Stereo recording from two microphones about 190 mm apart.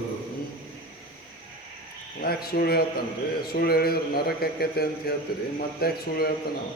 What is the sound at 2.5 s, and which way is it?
A man's voice, 55° left (ahead or behind).